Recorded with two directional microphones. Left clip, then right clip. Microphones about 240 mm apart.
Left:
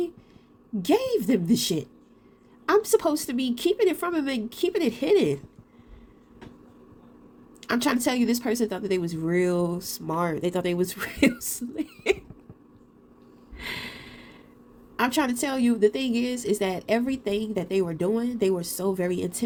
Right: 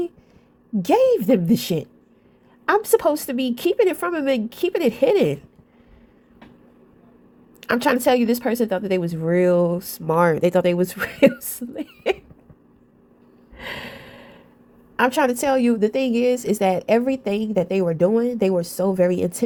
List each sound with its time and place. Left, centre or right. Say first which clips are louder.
0.8 s a woman's voice: right 7 dB; right
7.6 s a woman's voice: right 6 dB; right
13.6 s a sound: right 2 dB; centre
14.9 s a woman's voice: right 6 dB; right